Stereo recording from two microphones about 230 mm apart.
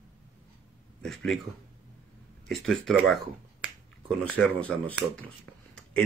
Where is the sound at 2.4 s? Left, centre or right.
Centre.